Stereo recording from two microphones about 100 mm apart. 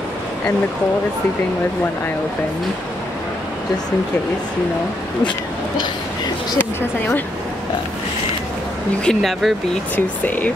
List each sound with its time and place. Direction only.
9.0 s speech: centre (ahead or behind)
9.9 s speech: 15° left (ahead or behind)